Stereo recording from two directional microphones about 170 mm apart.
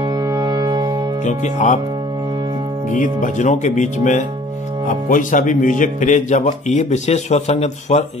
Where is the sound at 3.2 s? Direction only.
45° left (ahead or behind).